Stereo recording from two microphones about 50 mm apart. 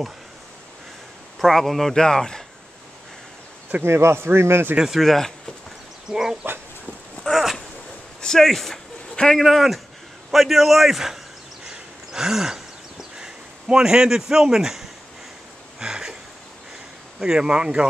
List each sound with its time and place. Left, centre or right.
1.4 s speech: centre
3.8 s speech: right
4.7 s speech: centre
5.0 s a man's voice: centre
6.0 s speech: centre
7.3 s speech: centre
9.1 s a sound: centre
9.4 s a man's voice: centre
11.6 s a sound: centre
13.2 s speech: centre
15.8 s a sound: centre
17.2 s speech: centre